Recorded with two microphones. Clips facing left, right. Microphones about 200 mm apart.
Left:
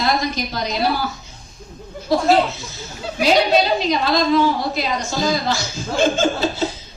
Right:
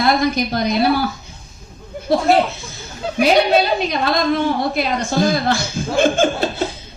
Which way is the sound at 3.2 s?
55° right (ahead or behind).